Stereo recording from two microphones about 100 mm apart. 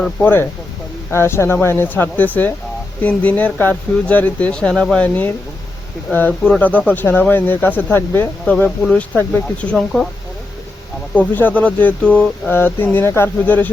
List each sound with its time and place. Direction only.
0.2 s speech: 20° left (ahead or behind)
8.4 s speech: 10° left (ahead or behind)
11.1 s speech: 15° left (ahead or behind)